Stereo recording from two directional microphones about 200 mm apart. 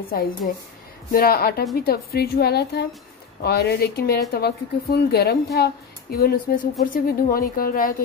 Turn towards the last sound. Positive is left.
turn(degrees=45)  # may be behind; listen again after turning